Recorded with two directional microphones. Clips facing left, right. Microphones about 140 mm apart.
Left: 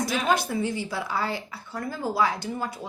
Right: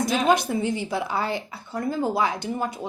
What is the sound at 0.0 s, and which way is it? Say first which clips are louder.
A woman's voice: right 4 dB; 20° right (ahead or behind).